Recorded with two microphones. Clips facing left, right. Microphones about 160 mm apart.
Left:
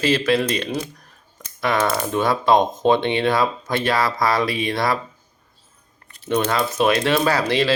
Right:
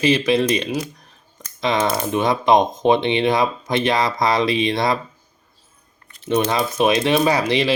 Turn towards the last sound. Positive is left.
turn(degrees=-15)  # may be behind; listen again after turning